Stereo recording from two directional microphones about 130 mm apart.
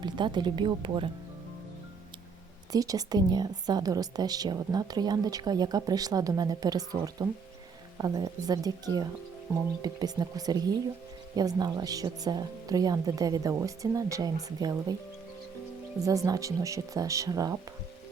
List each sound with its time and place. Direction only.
0.0 s speech: 35° right (ahead or behind)
2.7 s a woman's voice: 30° right (ahead or behind)
16.0 s a woman's voice: 25° right (ahead or behind)